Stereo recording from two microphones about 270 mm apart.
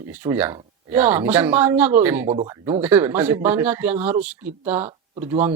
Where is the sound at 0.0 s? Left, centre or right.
Centre.